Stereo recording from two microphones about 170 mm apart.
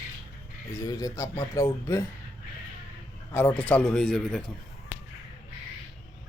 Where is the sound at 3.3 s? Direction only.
10° left (ahead or behind).